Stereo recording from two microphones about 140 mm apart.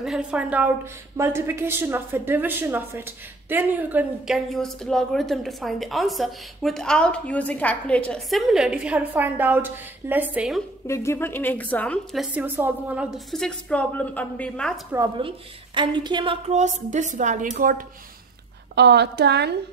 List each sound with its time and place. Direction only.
0.0 s a woman's voice: 5° right (ahead or behind)
1.1 s a woman's voice: 20° right (ahead or behind)
4.5 s a woman's voice: centre (ahead or behind)
10.9 s a woman's voice: 20° left (ahead or behind)
12.4 s a woman's voice: 15° right (ahead or behind)
13.3 s a woman's voice: 5° left (ahead or behind)
15.1 s a woman's voice: 40° right (ahead or behind)
16.4 s a woman's voice: 55° right (ahead or behind); by 17.8 s 85° right